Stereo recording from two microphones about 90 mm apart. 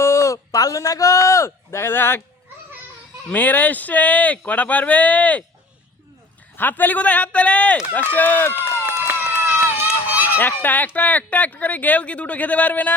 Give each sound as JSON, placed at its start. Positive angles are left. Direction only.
{"t": 0.0, "sound": "speech", "side_deg": 35}
{"t": 3.3, "sound": "speech", "side_deg": 20}
{"t": 6.6, "sound": "speech", "side_deg": 20}
{"t": 9.0, "sound": "run", "side_deg": -20}
{"t": 10.3, "sound": "speech", "side_deg": 20}